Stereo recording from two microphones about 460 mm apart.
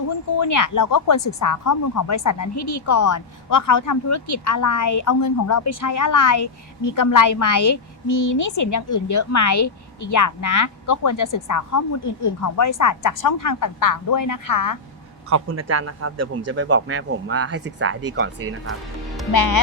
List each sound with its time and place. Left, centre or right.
0.3 s speech: left
2.6 s speech: left
2.8 s a woman's voice: left
15.3 s a man's voice: right
19.3 s speech: left